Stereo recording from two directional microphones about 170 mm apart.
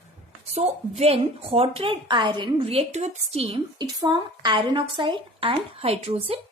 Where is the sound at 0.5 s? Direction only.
40° right (ahead or behind).